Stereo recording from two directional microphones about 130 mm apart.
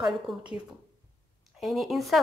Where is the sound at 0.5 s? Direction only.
45° left (ahead or behind).